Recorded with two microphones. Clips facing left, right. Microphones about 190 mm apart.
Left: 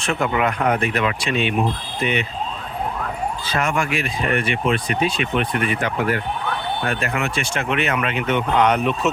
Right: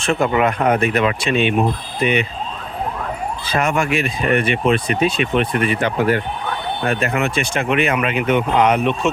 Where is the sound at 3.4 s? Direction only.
15° right (ahead or behind).